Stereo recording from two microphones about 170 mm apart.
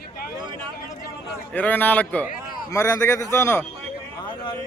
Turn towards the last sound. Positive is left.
turn(degrees=15)  # may be behind; listen again after turning